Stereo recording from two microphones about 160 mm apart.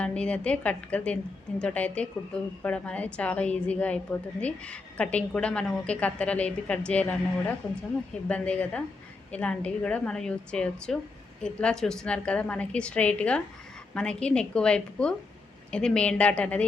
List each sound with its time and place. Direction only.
0.0 s a woman's voice: 5° left (ahead or behind)